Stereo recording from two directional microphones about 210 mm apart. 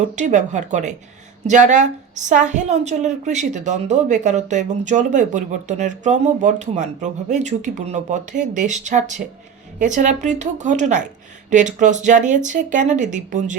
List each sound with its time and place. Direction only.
0.0 s a woman's voice: 35° right (ahead or behind)